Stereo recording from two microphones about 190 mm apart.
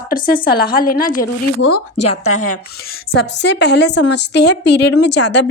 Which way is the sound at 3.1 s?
65° left (ahead or behind).